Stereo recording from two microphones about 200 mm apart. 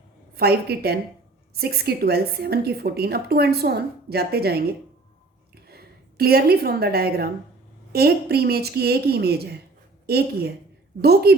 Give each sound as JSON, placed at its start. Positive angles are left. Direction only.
{"t": 0.3, "sound": "a woman's voice", "side_deg": -50}